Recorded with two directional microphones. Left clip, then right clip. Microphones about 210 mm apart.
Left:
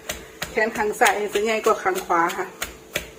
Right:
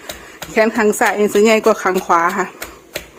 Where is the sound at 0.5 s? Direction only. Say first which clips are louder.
Right 9 dB; 55° right (ahead or behind).